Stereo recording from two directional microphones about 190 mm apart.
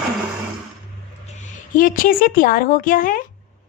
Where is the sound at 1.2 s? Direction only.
40° left (ahead or behind).